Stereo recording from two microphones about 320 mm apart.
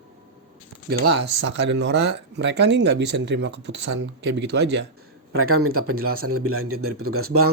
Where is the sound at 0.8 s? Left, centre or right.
Right.